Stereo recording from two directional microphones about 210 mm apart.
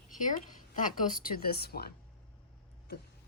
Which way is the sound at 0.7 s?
40° left (ahead or behind).